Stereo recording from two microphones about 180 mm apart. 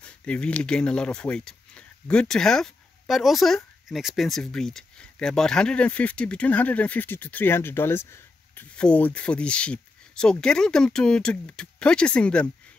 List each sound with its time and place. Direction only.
0.0 s speech: 5° left (ahead or behind)